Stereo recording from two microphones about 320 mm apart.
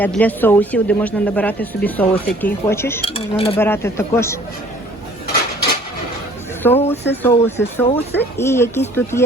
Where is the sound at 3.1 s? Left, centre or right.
Centre.